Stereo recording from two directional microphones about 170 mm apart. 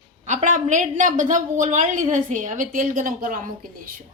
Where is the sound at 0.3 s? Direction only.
45° right (ahead or behind).